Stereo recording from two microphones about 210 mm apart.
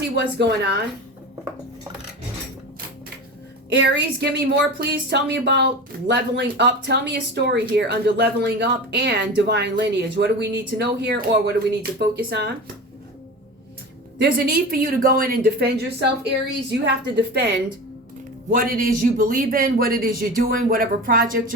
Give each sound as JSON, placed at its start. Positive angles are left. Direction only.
{"t": 0.2, "sound": "speech", "side_deg": -55}
{"t": 3.7, "sound": "a woman's voice", "side_deg": -55}
{"t": 14.2, "sound": "a woman's voice", "side_deg": -45}
{"t": 18.5, "sound": "speech", "side_deg": -45}